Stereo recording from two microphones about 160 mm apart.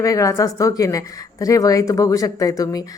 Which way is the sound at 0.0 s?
20° left (ahead or behind).